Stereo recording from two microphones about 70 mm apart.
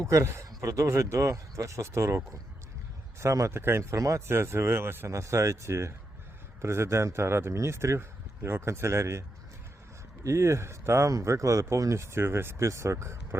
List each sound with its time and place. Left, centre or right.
0.0 s a man's voice: right
4.3 s speech: right
5.1 s a man's voice: right
10.2 s a man's voice: right